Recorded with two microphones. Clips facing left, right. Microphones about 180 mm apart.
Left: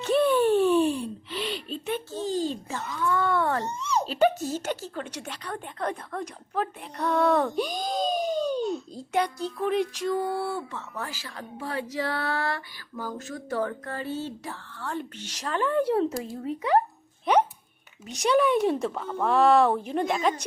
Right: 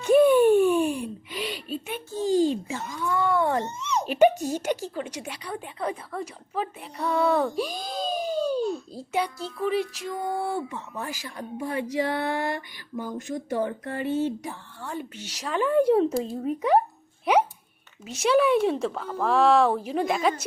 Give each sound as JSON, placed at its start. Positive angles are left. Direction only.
{"t": 0.0, "sound": "a sound", "side_deg": -10}
{"t": 3.7, "sound": "babbling", "side_deg": 35}
{"t": 4.0, "sound": "a woman's voice", "side_deg": -15}